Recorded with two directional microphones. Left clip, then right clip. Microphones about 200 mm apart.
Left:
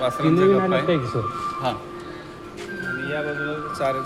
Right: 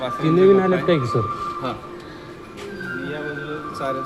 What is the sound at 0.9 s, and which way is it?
Speech, 45° right (ahead or behind).